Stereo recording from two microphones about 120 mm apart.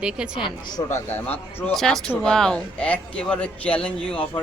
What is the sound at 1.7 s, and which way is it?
Speech, 5° left (ahead or behind).